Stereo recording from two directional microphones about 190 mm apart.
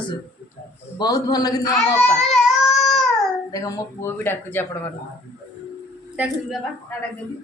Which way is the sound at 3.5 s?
20° left (ahead or behind).